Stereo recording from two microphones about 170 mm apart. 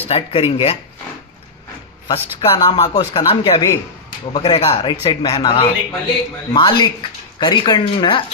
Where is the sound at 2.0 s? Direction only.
25° left (ahead or behind).